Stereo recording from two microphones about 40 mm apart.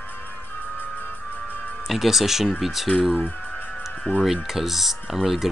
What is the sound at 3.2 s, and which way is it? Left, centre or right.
Music, left.